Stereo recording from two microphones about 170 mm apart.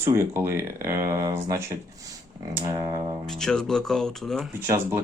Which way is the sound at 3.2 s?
5° left (ahead or behind).